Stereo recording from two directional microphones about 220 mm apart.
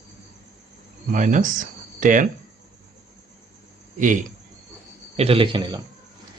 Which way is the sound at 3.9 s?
35° right (ahead or behind).